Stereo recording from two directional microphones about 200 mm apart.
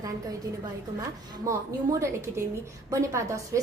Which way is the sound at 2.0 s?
15° right (ahead or behind).